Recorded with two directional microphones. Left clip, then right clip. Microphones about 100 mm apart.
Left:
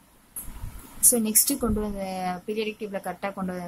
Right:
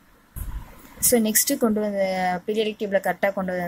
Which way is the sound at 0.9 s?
30° right (ahead or behind).